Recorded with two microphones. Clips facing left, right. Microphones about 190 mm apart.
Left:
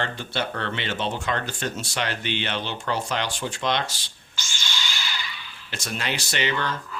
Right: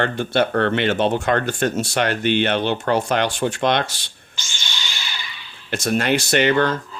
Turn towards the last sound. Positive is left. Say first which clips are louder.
# right 10 dB
turn(degrees=-55)  # may be behind; listen again after turning